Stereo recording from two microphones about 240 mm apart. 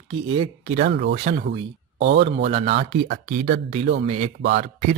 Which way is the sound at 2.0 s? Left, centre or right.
Right.